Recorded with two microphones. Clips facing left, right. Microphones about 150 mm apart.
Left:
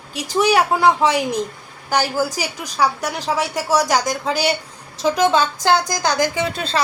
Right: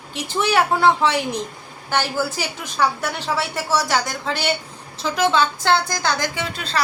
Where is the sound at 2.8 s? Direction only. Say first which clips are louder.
Left 2 dB; 10° left (ahead or behind).